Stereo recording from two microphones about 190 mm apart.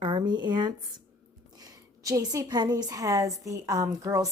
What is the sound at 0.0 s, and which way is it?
Speech, 25° right (ahead or behind).